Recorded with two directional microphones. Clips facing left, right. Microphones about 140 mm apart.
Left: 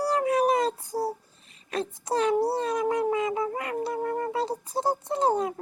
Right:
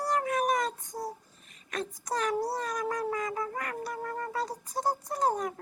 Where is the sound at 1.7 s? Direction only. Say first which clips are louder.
Left 5 dB; 30° left (ahead or behind).